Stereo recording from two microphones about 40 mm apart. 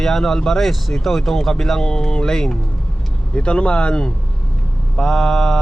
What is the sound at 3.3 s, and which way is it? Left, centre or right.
A man's voice, left.